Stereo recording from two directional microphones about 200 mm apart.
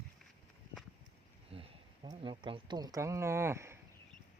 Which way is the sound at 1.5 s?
25° right (ahead or behind).